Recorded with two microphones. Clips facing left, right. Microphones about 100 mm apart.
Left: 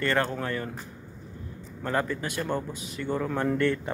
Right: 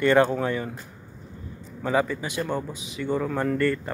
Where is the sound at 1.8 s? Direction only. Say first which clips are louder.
Right 4 dB; 5° right (ahead or behind).